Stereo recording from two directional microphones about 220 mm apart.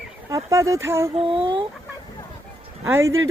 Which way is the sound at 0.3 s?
15° right (ahead or behind).